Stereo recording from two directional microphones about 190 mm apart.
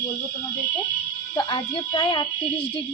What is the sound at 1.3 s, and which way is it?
Speech, 25° left (ahead or behind).